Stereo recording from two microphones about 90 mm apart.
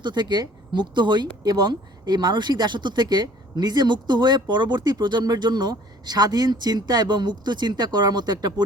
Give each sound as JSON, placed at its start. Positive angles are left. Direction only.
{"t": 0.0, "sound": "speech", "side_deg": -55}